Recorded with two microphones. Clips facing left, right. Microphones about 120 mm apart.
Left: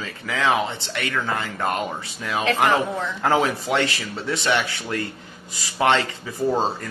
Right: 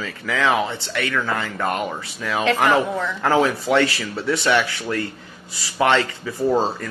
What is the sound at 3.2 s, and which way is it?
Speech, 25° left (ahead or behind).